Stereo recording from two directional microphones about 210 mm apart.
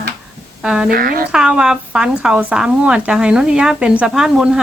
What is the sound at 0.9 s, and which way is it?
Speech, 45° right (ahead or behind).